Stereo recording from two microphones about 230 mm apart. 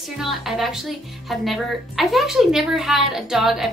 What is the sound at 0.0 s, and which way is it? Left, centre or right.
A woman's voice, centre.